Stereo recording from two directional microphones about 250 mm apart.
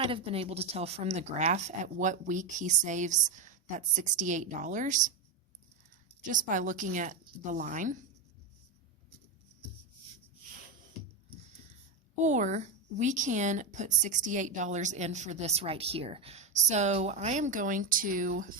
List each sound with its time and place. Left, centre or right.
0.0 s a woman's voice: right
6.3 s a woman's voice: right
12.2 s a woman's voice: right